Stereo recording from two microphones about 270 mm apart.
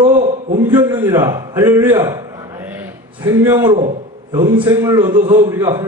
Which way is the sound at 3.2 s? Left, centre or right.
Centre.